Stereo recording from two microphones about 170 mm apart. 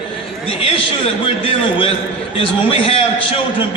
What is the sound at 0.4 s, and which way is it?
A man's voice, 35° left (ahead or behind).